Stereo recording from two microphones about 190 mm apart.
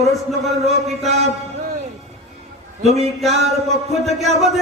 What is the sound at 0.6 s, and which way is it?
Speech, 35° right (ahead or behind).